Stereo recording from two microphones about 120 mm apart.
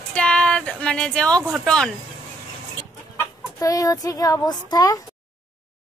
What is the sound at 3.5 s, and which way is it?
Speech, 30° left (ahead or behind).